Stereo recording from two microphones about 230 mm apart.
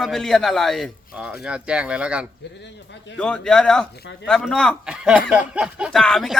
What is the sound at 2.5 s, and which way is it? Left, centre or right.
Speech, left.